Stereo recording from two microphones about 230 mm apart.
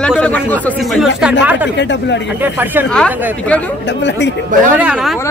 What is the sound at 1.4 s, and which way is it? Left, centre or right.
Speech, centre.